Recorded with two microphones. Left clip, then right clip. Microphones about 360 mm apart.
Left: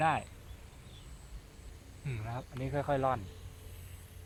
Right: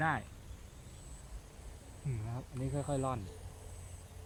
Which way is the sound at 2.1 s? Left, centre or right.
Left.